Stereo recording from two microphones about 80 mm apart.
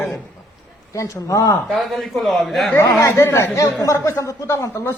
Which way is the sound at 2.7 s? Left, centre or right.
Left.